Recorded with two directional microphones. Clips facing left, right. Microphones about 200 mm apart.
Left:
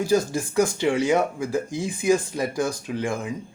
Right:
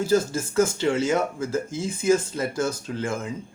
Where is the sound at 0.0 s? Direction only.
15° left (ahead or behind).